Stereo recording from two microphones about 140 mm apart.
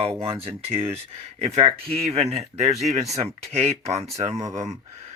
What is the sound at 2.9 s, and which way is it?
Speech, 25° right (ahead or behind).